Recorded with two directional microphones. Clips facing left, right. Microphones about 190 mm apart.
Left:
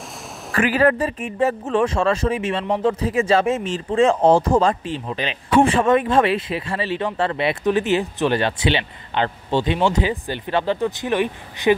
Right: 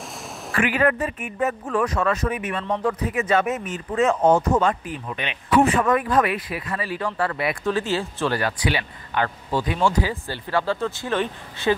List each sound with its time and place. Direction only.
0.5 s speech: 35° left (ahead or behind); by 11.7 s 15° left (ahead or behind)